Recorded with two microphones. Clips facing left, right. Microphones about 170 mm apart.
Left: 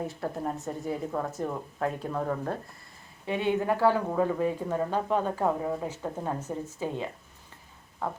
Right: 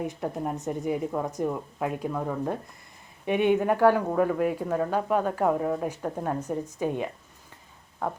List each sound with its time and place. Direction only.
0.0 s speech: 15° right (ahead or behind)